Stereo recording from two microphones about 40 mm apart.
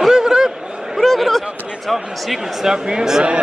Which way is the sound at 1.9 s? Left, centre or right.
Centre.